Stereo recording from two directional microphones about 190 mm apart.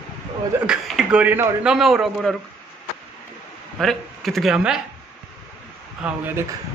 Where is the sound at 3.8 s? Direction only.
Centre (ahead or behind).